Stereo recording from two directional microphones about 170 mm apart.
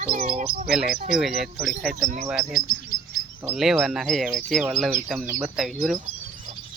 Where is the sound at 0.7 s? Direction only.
5° right (ahead or behind).